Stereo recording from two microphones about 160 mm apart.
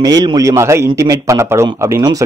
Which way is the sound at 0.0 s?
25° right (ahead or behind).